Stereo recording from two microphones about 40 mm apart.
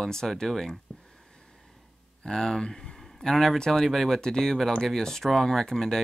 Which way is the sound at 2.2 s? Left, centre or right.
Centre.